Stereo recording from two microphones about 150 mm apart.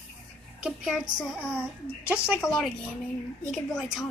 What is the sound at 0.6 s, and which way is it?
A woman's voice, 5° right (ahead or behind).